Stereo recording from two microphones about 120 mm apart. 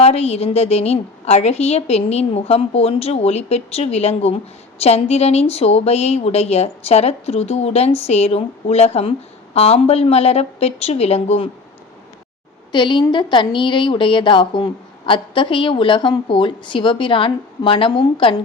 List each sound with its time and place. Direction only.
0.0 s speech: 60° left (ahead or behind)
12.7 s a woman's voice: 40° left (ahead or behind)